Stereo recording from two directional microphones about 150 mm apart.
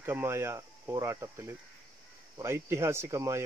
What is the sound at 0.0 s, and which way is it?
Speech, 15° right (ahead or behind).